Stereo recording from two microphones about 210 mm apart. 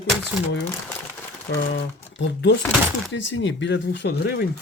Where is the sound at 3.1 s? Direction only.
60° left (ahead or behind).